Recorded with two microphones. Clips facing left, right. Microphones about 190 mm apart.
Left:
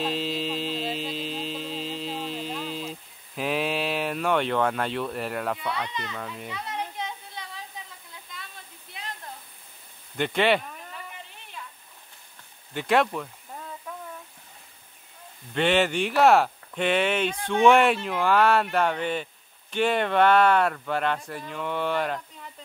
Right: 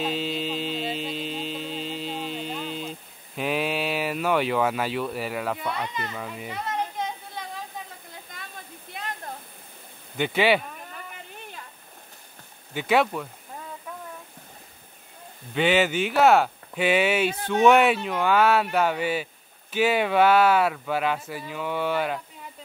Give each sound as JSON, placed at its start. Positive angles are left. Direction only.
{"t": 0.0, "sound": "hum", "side_deg": 0}
{"t": 5.7, "sound": "speech", "side_deg": -50}
{"t": 6.1, "sound": "speech", "side_deg": -5}
{"t": 6.5, "sound": "a sound", "side_deg": -50}
{"t": 10.1, "sound": "speech", "side_deg": -5}
{"t": 12.7, "sound": "a sound", "side_deg": 0}
{"t": 15.5, "sound": "speech", "side_deg": 0}